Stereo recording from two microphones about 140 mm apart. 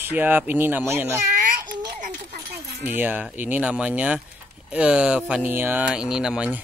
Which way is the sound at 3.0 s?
10° right (ahead or behind).